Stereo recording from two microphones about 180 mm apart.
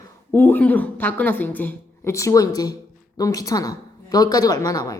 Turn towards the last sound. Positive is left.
turn(degrees=20)  # may be behind; listen again after turning